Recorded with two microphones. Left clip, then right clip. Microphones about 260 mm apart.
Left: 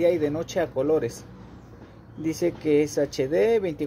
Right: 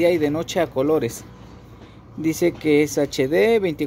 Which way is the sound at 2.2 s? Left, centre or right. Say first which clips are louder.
Right 5 dB; right.